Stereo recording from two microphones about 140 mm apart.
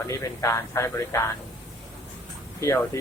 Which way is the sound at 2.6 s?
20° left (ahead or behind).